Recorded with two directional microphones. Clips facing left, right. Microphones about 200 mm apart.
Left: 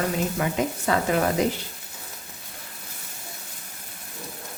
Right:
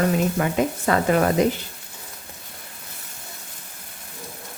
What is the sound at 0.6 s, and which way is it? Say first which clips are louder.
Speech: right 4 dB; 55° right (ahead or behind).